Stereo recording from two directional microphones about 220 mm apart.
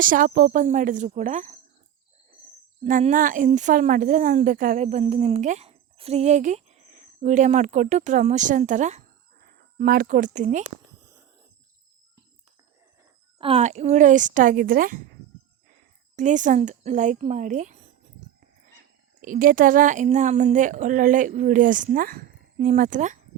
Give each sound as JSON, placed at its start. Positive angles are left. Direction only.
{"t": 0.0, "sound": "a woman's voice", "side_deg": -40}
{"t": 2.8, "sound": "a woman's voice", "side_deg": -35}
{"t": 9.7, "sound": "a woman's voice", "side_deg": -45}
{"t": 13.4, "sound": "a woman's voice", "side_deg": -30}
{"t": 16.1, "sound": "a woman's voice", "side_deg": -35}
{"t": 19.2, "sound": "a woman's voice", "side_deg": -40}